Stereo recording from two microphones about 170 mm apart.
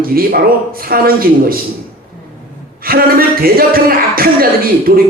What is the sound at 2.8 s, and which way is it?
Speech, 60° right (ahead or behind).